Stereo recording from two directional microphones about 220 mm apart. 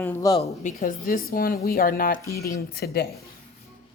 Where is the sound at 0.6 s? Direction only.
40° left (ahead or behind).